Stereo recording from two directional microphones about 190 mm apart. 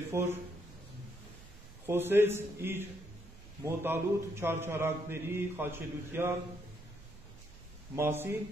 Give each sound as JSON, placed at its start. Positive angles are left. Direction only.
{"t": 0.1, "sound": "speech", "side_deg": -15}
{"t": 1.9, "sound": "speech", "side_deg": -10}
{"t": 7.9, "sound": "speech", "side_deg": -15}